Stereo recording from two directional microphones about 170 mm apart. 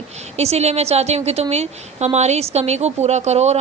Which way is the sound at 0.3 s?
40° right (ahead or behind).